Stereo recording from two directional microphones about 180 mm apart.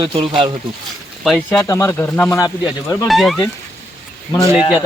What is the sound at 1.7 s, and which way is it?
Speech, 15° left (ahead or behind).